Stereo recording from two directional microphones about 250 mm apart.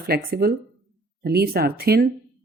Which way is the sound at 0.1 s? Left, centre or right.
Right.